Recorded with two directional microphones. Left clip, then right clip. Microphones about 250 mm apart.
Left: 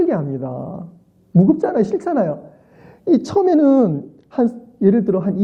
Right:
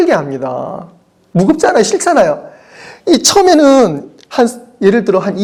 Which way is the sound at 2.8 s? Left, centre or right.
Centre.